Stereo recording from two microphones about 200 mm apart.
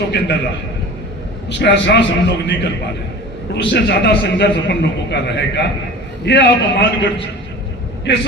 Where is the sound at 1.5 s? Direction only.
60° left (ahead or behind).